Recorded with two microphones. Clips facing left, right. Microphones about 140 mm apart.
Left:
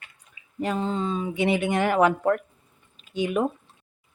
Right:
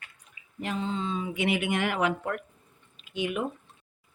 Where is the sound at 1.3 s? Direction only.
30° left (ahead or behind).